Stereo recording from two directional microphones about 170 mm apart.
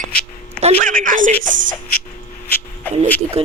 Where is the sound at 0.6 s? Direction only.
40° right (ahead or behind).